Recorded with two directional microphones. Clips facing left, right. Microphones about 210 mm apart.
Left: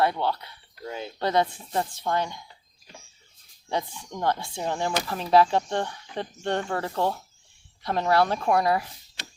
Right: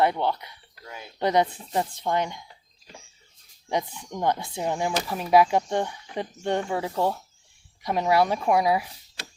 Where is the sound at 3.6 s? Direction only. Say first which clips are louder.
Right 2 dB; 15° right (ahead or behind).